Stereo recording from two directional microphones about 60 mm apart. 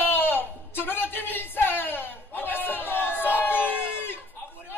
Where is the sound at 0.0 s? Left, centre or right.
Left.